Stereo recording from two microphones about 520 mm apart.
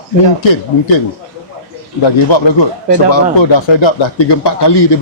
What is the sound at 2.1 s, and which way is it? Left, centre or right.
Speech, left.